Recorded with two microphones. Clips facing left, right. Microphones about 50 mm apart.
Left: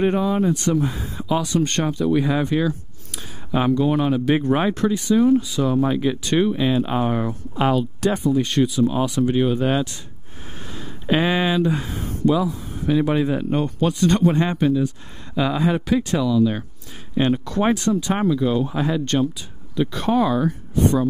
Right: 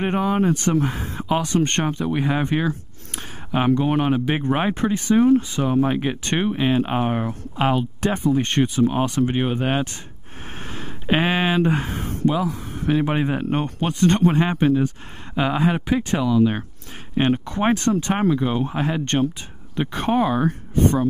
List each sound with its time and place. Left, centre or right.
0.0 s speech: right
4.3 s speech: right
11.1 s speech: right
11.6 s speech: right
14.4 s speech: right
15.3 s speech: right
17.7 s a woman's voice: right